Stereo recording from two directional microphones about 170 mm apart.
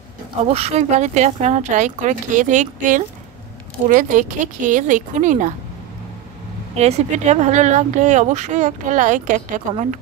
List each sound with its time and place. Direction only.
0.5 s speech: 40° right (ahead or behind)
6.7 s speech: 40° right (ahead or behind)